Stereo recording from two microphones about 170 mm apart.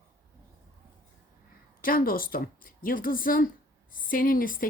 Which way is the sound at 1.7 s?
55° left (ahead or behind).